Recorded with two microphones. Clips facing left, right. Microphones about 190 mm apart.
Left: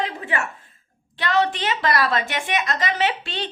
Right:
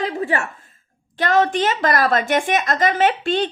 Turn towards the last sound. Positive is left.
turn(degrees=-50)  # may be behind; listen again after turning